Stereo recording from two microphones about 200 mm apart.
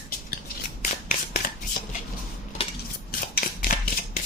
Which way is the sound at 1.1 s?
45° left (ahead or behind).